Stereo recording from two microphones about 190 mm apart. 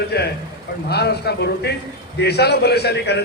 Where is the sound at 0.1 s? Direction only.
60° left (ahead or behind).